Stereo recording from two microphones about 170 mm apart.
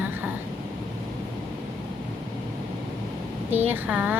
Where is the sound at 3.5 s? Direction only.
10° right (ahead or behind).